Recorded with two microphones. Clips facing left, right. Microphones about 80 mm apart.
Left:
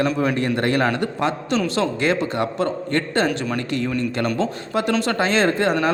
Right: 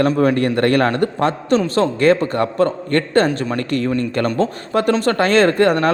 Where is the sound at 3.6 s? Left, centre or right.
Right.